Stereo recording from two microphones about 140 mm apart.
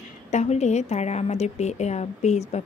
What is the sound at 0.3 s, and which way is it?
A woman's voice, 55° left (ahead or behind).